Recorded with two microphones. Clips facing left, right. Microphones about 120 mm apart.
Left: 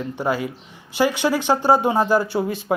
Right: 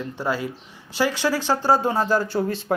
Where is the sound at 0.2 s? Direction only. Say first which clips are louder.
Left 3 dB; 15° left (ahead or behind).